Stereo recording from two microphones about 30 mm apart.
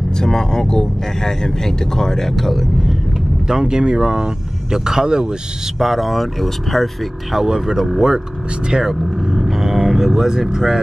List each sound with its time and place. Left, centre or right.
0.2 s speech: left
3.4 s speech: right
5.8 s speech: centre
7.3 s speech: centre
8.8 s vehicle: centre
9.4 s didgeridoo: centre
10.0 s speech: centre